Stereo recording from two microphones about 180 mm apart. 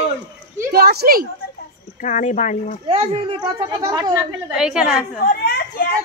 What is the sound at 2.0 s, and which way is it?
Speech, 45° left (ahead or behind).